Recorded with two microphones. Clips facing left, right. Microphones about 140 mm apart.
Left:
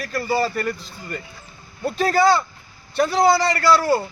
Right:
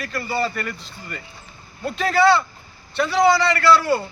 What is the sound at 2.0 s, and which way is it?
A man's voice, 40° left (ahead or behind).